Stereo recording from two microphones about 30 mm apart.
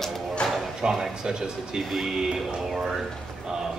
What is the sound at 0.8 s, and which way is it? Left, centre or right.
Speech, right.